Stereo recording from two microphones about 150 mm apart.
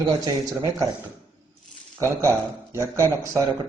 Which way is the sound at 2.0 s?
20° right (ahead or behind).